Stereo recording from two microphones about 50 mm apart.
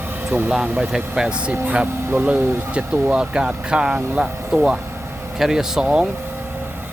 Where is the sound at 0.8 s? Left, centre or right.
Centre.